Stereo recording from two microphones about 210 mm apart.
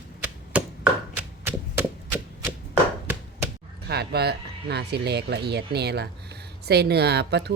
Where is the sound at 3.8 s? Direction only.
50° right (ahead or behind).